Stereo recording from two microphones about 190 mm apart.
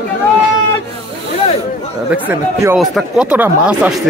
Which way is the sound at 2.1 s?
10° right (ahead or behind).